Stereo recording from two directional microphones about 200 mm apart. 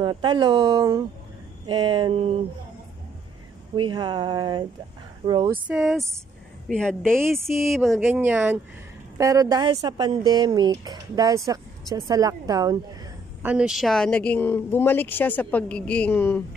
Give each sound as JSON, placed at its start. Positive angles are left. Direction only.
{"t": 0.0, "sound": "speech", "side_deg": -25}
{"t": 3.7, "sound": "speech", "side_deg": -25}
{"t": 5.5, "sound": "speech", "side_deg": -5}
{"t": 7.2, "sound": "speech", "side_deg": -15}
{"t": 7.7, "sound": "speech", "side_deg": 0}
{"t": 13.4, "sound": "speech", "side_deg": -5}